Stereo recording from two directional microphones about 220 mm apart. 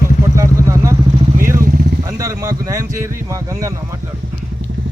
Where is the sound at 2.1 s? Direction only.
15° right (ahead or behind).